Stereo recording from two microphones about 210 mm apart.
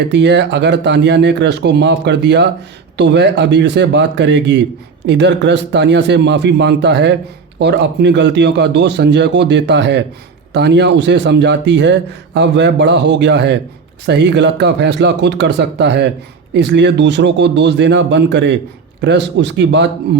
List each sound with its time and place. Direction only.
0.1 s speech: 55° right (ahead or behind)